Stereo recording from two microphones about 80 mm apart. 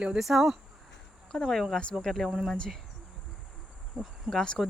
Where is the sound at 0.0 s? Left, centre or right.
Centre.